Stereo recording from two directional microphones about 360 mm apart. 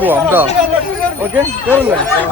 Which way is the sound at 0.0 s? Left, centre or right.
Centre.